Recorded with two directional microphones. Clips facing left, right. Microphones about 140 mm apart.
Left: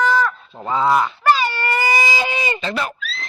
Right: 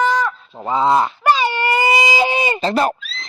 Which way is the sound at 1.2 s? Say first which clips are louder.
Right 1 dB; 15° right (ahead or behind).